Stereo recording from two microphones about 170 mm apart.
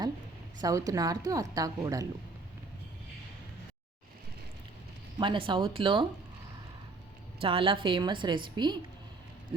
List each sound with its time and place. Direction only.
0.6 s a woman's voice: 20° right (ahead or behind)
5.2 s a woman's voice: 30° right (ahead or behind)
7.4 s a woman's voice: 30° right (ahead or behind)